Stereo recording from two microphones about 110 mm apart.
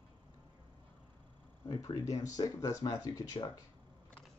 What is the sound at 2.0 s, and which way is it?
Speech, 30° left (ahead or behind).